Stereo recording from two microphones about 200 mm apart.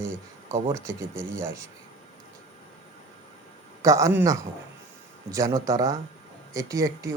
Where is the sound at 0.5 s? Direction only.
15° right (ahead or behind).